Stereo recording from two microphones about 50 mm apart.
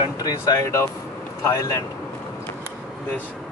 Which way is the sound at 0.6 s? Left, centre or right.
Left.